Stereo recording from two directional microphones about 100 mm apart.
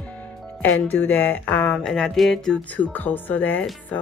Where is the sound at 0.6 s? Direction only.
15° left (ahead or behind).